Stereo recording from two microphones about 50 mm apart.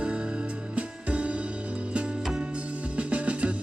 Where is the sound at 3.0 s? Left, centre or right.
Right.